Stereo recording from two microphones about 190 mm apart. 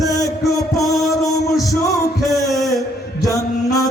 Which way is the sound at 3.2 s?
20° left (ahead or behind).